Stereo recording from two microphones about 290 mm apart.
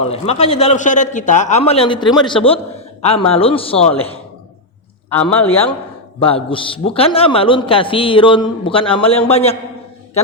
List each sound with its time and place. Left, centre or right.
0.0 s a man's voice: left
5.0 s speech: centre
6.1 s a man's voice: centre